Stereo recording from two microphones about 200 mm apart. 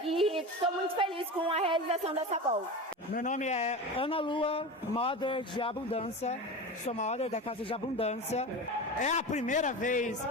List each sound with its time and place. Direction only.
0.0 s music: centre (ahead or behind)
0.6 s a woman's voice: 25° right (ahead or behind)
3.2 s speech: 40° left (ahead or behind)